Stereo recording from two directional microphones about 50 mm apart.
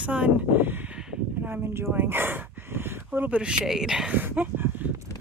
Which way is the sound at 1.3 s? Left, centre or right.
Right.